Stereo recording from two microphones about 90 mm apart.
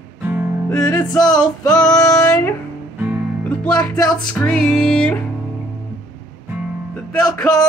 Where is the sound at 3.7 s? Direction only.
45° left (ahead or behind).